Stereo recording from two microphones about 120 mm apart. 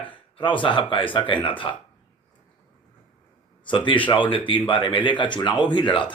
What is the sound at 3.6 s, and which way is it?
Speech, 45° left (ahead or behind).